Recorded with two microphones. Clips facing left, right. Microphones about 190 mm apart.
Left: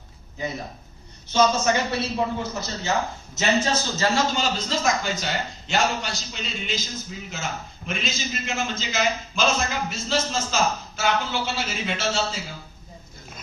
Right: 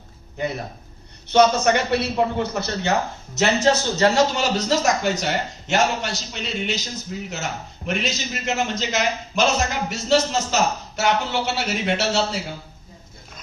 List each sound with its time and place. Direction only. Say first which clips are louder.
0.4 s a man's voice: right 4 dB; 65° right (ahead or behind)